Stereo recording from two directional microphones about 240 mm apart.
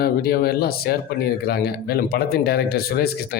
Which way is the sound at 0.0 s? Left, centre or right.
Left.